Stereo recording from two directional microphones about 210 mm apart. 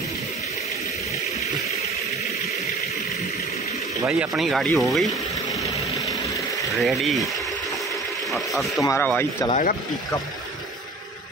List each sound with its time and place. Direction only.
4.1 s speech: centre (ahead or behind)
6.8 s speech: centre (ahead or behind)
8.3 s speech: centre (ahead or behind)
9.5 s speech: 35° left (ahead or behind)